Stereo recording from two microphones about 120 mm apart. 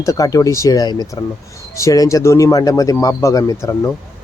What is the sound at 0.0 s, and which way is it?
Speech, 30° left (ahead or behind).